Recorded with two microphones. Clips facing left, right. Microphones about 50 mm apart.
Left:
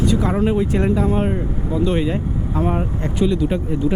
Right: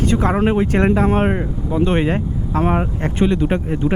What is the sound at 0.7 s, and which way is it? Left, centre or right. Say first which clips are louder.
Speech: right 3 dB; right.